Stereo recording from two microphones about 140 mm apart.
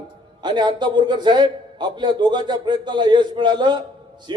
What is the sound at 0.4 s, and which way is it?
A man's voice, 35° right (ahead or behind).